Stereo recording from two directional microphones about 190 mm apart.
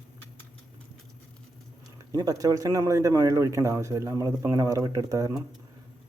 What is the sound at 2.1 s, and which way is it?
A man's voice, 20° right (ahead or behind).